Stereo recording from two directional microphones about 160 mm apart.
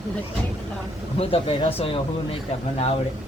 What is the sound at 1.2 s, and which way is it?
Speech, 35° left (ahead or behind).